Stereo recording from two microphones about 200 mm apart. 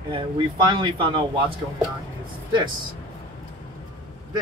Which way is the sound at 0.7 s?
25° right (ahead or behind).